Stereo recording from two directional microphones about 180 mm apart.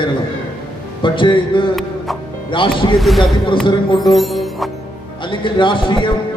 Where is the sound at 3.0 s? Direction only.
Centre (ahead or behind).